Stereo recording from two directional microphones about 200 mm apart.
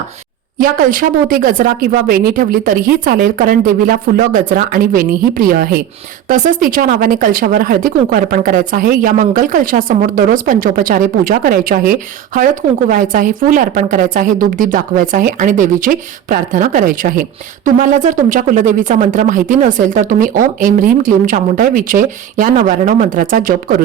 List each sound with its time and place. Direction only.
0.6 s speech: 45° right (ahead or behind)